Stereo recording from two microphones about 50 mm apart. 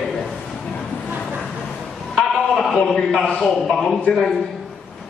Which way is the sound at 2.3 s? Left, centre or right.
Centre.